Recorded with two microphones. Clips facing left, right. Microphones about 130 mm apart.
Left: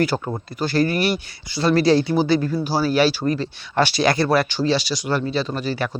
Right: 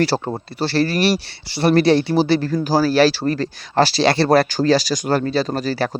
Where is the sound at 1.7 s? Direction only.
65° right (ahead or behind).